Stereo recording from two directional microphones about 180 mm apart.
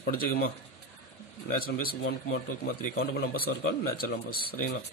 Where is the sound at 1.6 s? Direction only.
50° left (ahead or behind).